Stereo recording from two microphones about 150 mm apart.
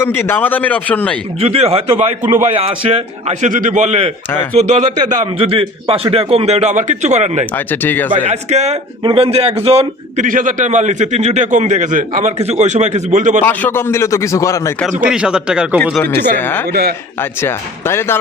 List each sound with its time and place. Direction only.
0.0 s speech: 15° left (ahead or behind)
1.4 s a man's voice: 40° right (ahead or behind)
7.5 s speech: 15° left (ahead or behind)
8.3 s a man's voice: 50° right (ahead or behind)
10.2 s a man's voice: 60° right (ahead or behind)
12.4 s a man's voice: 50° right (ahead or behind)
13.4 s speech: 10° left (ahead or behind)
15.0 s speech: 5° right (ahead or behind)
16.4 s speech: 15° left (ahead or behind)
16.6 s a man's voice: 90° right
17.2 s speech: 15° left (ahead or behind)